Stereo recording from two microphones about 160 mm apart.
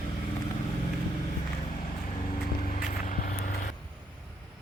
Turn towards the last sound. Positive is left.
turn(degrees=60)  # may be behind; listen again after turning